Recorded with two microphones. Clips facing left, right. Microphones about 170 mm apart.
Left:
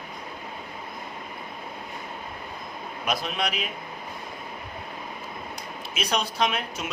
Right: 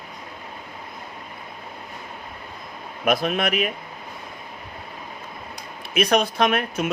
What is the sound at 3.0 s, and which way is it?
Speech, 55° right (ahead or behind).